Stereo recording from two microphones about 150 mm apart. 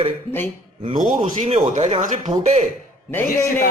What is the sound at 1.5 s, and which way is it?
A man's voice, 40° right (ahead or behind).